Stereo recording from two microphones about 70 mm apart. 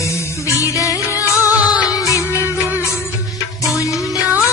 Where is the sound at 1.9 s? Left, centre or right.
Left.